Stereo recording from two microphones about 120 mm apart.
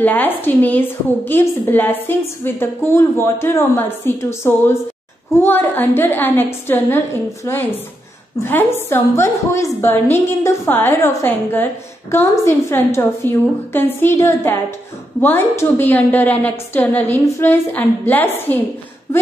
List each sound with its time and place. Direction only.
0.0 s a woman's voice: 15° left (ahead or behind)